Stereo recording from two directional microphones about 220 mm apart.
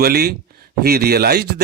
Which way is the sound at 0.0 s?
45° right (ahead or behind).